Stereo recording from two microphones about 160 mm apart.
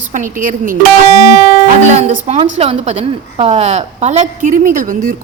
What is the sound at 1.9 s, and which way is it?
A woman's voice, 45° right (ahead or behind).